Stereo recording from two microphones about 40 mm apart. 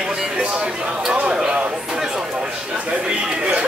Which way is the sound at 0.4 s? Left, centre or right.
Right.